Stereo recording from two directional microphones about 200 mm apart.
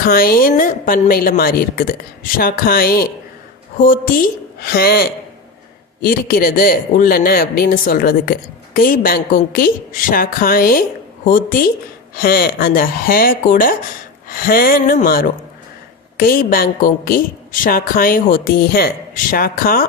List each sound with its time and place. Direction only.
0.0 s a man's voice: 45° left (ahead or behind)